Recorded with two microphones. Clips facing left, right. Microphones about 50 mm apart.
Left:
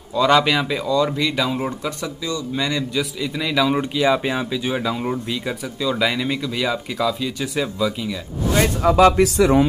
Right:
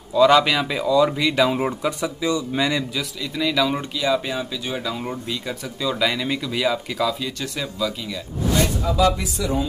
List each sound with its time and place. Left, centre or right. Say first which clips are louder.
0.1 s speech: right 1 dB; centre
3.0 s speech: left 2 dB; centre
8.8 s speech: left 6 dB; left